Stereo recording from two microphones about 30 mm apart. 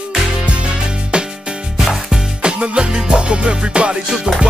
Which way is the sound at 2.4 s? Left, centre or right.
Right.